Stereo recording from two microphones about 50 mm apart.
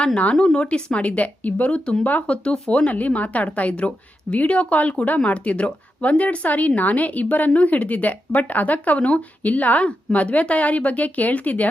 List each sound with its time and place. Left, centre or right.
0.3 s speech: centre; by 11.7 s left